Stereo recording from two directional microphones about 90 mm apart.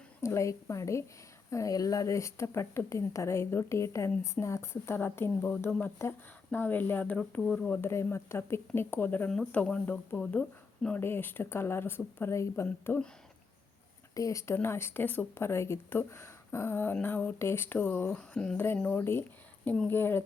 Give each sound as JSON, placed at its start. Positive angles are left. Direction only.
{"t": 0.2, "sound": "speech", "side_deg": 30}
{"t": 7.7, "sound": "speech", "side_deg": 25}
{"t": 14.2, "sound": "speech", "side_deg": 35}
{"t": 18.1, "sound": "speech", "side_deg": 10}
{"t": 18.5, "sound": "speech", "side_deg": 25}
{"t": 19.6, "sound": "speech", "side_deg": 10}
{"t": 19.9, "sound": "speech", "side_deg": 25}